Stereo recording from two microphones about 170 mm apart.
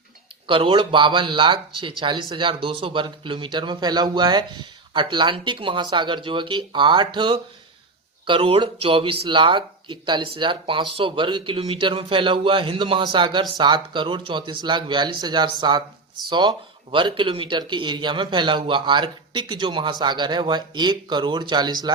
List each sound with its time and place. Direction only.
0.4 s a man's voice: 30° right (ahead or behind)